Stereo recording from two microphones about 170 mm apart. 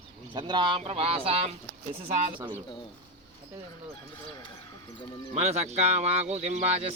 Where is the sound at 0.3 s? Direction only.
30° right (ahead or behind).